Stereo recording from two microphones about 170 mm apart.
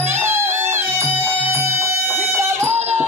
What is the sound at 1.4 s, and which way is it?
Music, 15° right (ahead or behind).